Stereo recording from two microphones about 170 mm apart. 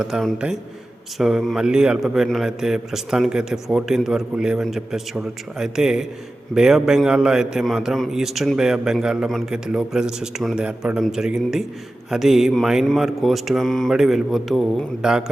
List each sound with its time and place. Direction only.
0.0 s a man's voice: centre (ahead or behind)